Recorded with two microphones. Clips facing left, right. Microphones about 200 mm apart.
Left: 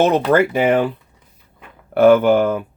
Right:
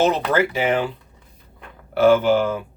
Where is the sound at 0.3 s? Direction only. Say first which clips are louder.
Left 5 dB; 55° left (ahead or behind).